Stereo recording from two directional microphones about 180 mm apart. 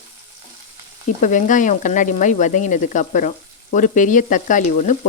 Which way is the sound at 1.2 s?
45° left (ahead or behind).